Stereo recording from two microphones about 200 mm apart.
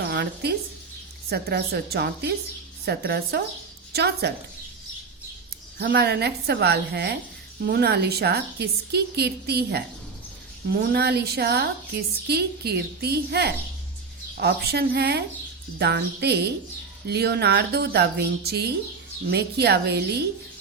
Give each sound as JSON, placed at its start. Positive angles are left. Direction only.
{"t": 0.0, "sound": "a sound", "side_deg": -55}
{"t": 1.3, "sound": "a woman's voice", "side_deg": -55}
{"t": 5.8, "sound": "a woman's voice", "side_deg": -55}